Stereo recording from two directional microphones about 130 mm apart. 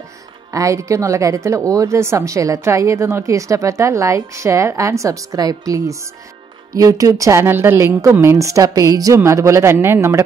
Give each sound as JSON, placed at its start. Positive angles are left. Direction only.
{"t": 0.5, "sound": "speech", "side_deg": -25}